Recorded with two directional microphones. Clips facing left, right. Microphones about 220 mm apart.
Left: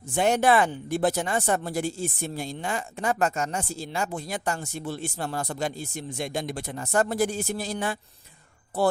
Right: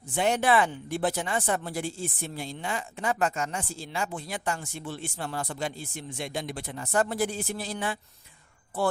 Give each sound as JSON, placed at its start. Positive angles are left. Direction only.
{"t": 0.1, "sound": "speech", "side_deg": 45}